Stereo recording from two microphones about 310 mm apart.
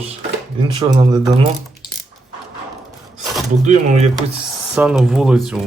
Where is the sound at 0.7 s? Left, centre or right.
Centre.